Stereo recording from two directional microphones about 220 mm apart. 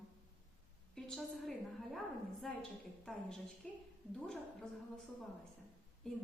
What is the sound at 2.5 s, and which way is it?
Speech, centre (ahead or behind).